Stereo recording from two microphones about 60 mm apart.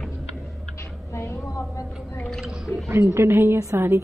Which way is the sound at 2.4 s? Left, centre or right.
Centre.